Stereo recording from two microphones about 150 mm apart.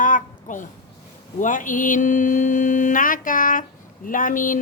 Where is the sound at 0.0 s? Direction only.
60° left (ahead or behind).